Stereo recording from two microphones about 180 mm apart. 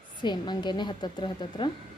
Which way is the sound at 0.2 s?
25° left (ahead or behind).